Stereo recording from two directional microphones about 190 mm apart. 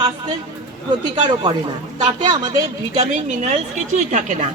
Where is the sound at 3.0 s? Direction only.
35° right (ahead or behind).